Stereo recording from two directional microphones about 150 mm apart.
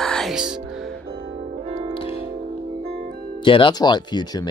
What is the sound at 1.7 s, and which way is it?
Music, 45° right (ahead or behind).